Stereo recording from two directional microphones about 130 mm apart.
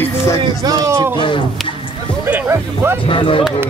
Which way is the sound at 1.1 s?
40° left (ahead or behind).